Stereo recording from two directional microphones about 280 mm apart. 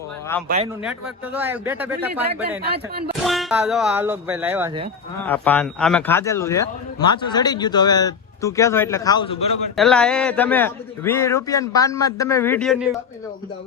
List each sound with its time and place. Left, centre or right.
0.4 s speech: right
0.9 s speech: centre
2.6 s speech: right
3.2 s speech: centre
5.2 s a man's voice: centre
9.7 s a man's voice: centre